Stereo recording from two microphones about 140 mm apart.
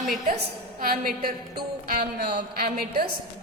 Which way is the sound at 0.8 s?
90° right.